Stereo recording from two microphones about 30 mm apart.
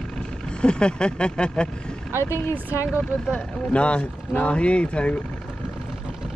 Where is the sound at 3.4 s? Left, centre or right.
Left.